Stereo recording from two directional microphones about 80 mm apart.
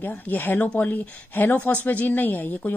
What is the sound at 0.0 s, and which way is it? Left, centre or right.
Speech, left.